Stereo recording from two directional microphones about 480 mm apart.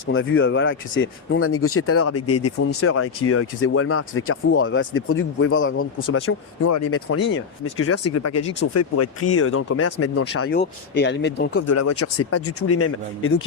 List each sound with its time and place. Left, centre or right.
0.0 s speech: left
11.7 s speech: left